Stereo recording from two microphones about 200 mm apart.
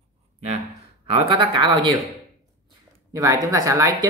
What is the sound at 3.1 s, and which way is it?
Speech, 15° right (ahead or behind).